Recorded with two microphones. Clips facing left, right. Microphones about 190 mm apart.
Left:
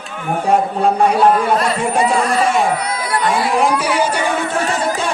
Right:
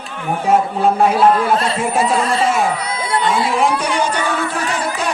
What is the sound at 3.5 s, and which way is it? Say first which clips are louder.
Speech: left 1 dB; centre (ahead or behind).